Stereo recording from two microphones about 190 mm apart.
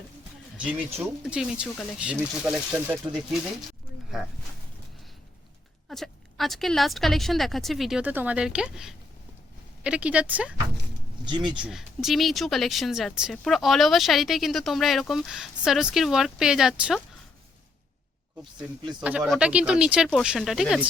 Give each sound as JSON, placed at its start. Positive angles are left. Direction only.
{"t": 1.2, "sound": "speech", "side_deg": -5}
{"t": 5.9, "sound": "a woman's voice", "side_deg": 0}
{"t": 11.3, "sound": "speech", "side_deg": -25}
{"t": 11.6, "sound": "speech", "side_deg": 0}
{"t": 19.0, "sound": "speech", "side_deg": -5}